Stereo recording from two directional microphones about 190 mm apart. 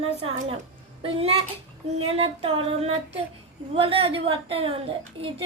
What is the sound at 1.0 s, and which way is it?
Child singing, 30° right (ahead or behind).